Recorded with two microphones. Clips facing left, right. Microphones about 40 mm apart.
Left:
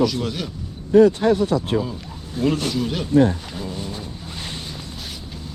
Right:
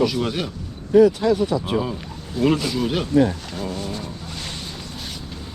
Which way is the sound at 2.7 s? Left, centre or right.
Centre.